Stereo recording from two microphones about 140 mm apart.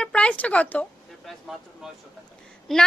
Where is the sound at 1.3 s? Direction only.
Centre (ahead or behind).